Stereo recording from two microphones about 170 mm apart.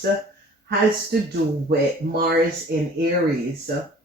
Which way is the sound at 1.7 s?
65° right (ahead or behind).